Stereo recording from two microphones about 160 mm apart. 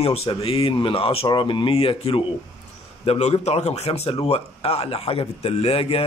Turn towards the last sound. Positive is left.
turn(degrees=40)  # may be behind; listen again after turning